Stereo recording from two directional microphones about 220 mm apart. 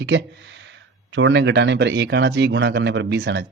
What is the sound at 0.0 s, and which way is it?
Speech, 55° right (ahead or behind).